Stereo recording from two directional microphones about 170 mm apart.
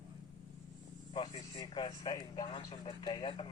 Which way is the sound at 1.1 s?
25° left (ahead or behind).